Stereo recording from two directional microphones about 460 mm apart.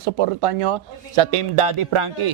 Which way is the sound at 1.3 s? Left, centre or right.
Right.